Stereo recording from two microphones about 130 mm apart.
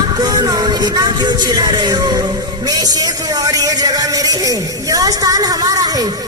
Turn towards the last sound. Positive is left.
turn(degrees=-30)  # may be behind; listen again after turning